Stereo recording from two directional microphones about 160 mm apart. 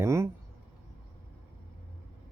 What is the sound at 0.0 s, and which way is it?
Speech, 15° right (ahead or behind).